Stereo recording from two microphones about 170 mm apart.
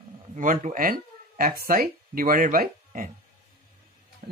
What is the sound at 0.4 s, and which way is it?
Speech, 50° right (ahead or behind).